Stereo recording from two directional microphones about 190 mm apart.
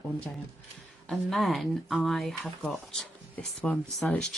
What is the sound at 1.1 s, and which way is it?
Speech, centre (ahead or behind).